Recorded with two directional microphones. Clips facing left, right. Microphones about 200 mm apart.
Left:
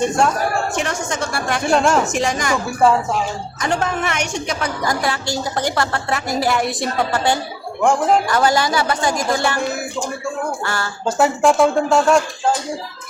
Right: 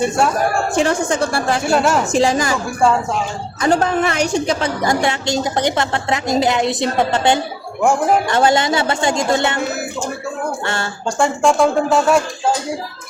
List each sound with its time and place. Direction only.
0.7 s speech: 30° right (ahead or behind)
1.6 s speech: 5° right (ahead or behind)
2.1 s speech: 30° right (ahead or behind)
3.6 s a woman's voice: 35° right (ahead or behind)
7.8 s speech: 10° right (ahead or behind)
8.3 s a woman's voice: 25° right (ahead or behind)
11.0 s speech: centre (ahead or behind)